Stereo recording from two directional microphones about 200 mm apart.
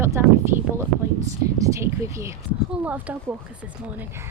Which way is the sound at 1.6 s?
15° right (ahead or behind).